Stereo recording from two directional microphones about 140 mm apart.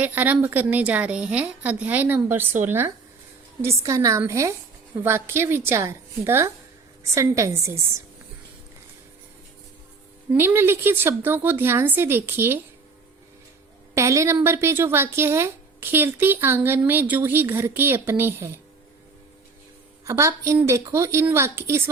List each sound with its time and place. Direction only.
0.0 s a woman's voice: 10° right (ahead or behind)
10.3 s a woman's voice: 15° right (ahead or behind)
13.9 s a woman's voice: 20° right (ahead or behind)
20.1 s speech: 20° right (ahead or behind)